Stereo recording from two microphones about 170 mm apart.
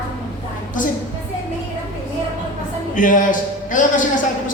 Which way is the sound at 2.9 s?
50° left (ahead or behind).